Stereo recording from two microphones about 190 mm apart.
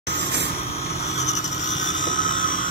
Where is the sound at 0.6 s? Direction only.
30° left (ahead or behind).